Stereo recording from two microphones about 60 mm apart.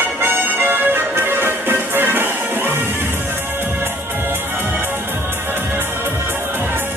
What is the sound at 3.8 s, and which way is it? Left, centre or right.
Music, right.